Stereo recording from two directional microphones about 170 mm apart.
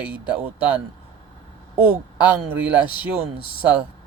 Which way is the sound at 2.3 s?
10° right (ahead or behind).